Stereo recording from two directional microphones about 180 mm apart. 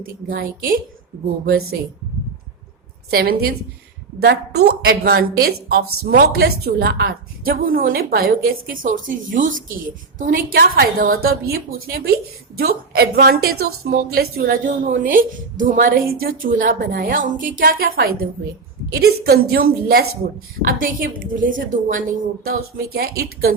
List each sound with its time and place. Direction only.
0.0 s a woman's voice: 55° right (ahead or behind)
3.1 s a woman's voice: 60° right (ahead or behind)
22.4 s a woman's voice: 60° right (ahead or behind)